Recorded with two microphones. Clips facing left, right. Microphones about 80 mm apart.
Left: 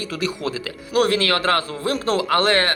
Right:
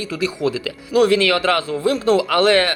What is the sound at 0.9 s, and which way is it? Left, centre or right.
Speech, left.